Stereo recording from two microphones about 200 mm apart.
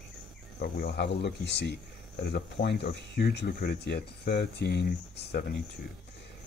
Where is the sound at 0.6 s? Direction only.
55° left (ahead or behind).